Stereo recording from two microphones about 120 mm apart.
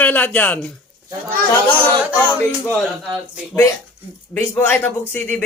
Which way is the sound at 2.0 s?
10° right (ahead or behind).